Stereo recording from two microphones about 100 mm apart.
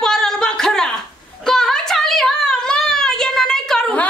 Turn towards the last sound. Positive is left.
turn(degrees=10)  # may be behind; listen again after turning